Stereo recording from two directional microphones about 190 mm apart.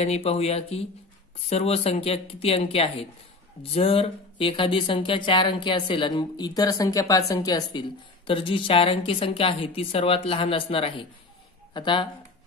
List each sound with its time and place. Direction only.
0.0 s speech: 35° left (ahead or behind)